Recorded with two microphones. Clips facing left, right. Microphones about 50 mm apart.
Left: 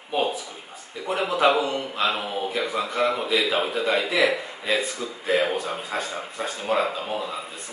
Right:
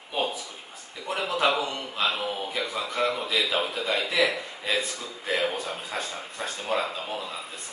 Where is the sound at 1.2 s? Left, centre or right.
Centre.